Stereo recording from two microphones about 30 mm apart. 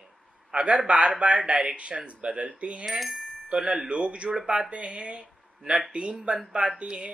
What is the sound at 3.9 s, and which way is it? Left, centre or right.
Speech, right.